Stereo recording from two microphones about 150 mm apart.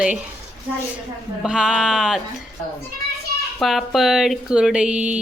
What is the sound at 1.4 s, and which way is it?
Speech, 5° right (ahead or behind).